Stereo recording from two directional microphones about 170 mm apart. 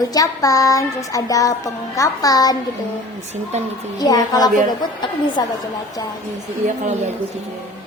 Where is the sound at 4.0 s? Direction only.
20° left (ahead or behind).